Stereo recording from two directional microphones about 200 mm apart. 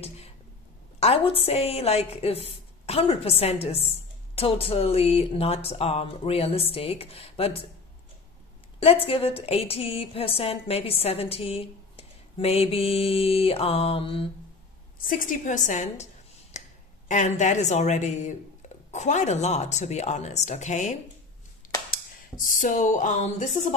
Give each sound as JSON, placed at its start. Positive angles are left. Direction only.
{"t": 0.9, "sound": "a woman's voice", "side_deg": 30}
{"t": 8.7, "sound": "a woman's voice", "side_deg": 30}
{"t": 15.0, "sound": "speech", "side_deg": 40}
{"t": 16.5, "sound": "a sound", "side_deg": 35}
{"t": 17.1, "sound": "speech", "side_deg": 35}